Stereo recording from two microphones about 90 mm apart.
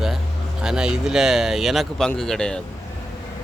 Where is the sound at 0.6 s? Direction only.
10° right (ahead or behind).